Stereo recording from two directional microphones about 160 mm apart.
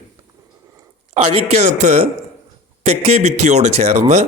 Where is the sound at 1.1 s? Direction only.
45° right (ahead or behind).